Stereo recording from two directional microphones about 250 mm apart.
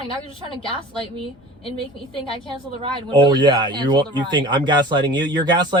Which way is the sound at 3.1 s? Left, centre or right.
Centre.